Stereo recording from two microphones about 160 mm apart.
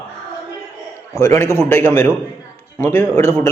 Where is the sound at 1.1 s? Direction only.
20° left (ahead or behind).